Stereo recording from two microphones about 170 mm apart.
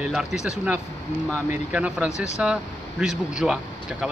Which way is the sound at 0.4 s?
5° right (ahead or behind).